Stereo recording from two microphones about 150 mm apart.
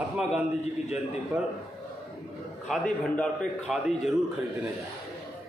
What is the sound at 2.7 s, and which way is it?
A man's voice, 5° left (ahead or behind).